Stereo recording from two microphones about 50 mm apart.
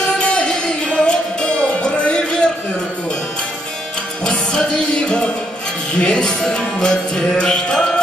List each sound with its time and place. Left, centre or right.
0.2 s music: left
4.2 s music: centre